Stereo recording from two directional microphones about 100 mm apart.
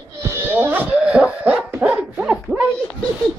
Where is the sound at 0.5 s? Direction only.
20° right (ahead or behind).